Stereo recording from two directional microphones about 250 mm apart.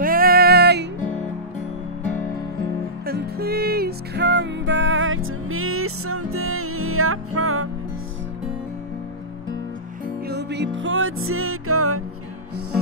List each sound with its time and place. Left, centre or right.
0.0 s music: right
3.1 s music: right
10.2 s music: right